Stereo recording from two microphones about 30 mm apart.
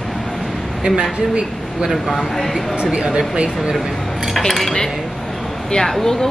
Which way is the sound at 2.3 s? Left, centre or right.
Centre.